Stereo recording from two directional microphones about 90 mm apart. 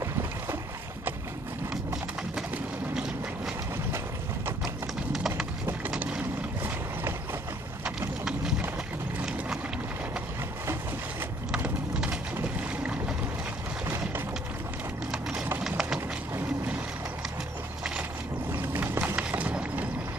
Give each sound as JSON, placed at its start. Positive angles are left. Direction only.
{"t": 5.1, "sound": "clip-clop", "side_deg": -5}
{"t": 5.9, "sound": "boat", "side_deg": -20}
{"t": 11.9, "sound": "vehicle", "side_deg": -10}
{"t": 13.8, "sound": "a sound", "side_deg": -25}
{"t": 15.0, "sound": "a sound", "side_deg": -5}
{"t": 18.5, "sound": "horse", "side_deg": -20}